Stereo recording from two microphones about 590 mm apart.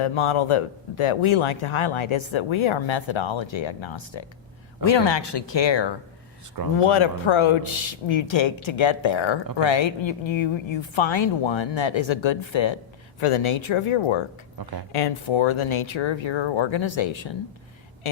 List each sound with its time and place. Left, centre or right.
0.0 s speech: left